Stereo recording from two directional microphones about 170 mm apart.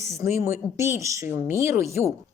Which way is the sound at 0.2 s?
15° right (ahead or behind).